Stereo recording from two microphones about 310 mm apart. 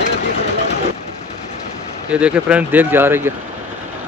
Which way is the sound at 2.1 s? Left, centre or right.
Centre.